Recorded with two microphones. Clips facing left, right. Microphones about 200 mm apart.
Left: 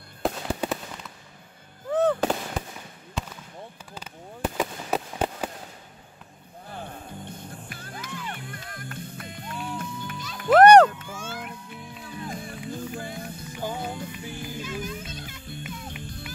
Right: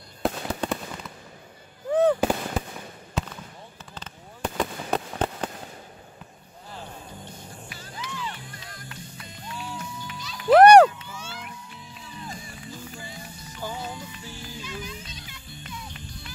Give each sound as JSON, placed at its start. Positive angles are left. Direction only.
{"t": 0.2, "sound": "fireworks", "side_deg": 0}
{"t": 1.9, "sound": "fireworks", "side_deg": -15}
{"t": 3.9, "sound": "fireworks", "side_deg": 10}
{"t": 6.7, "sound": "music", "side_deg": 55}
{"t": 10.5, "sound": "a sound", "side_deg": -10}
{"t": 10.9, "sound": "a sound", "side_deg": 50}
{"t": 12.0, "sound": "music", "side_deg": 55}